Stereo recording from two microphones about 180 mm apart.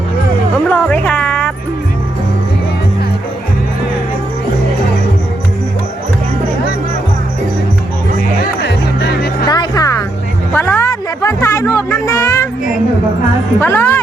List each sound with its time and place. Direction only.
0.7 s music: 10° left (ahead or behind)
9.5 s music: 20° left (ahead or behind)
13.6 s music: 10° left (ahead or behind)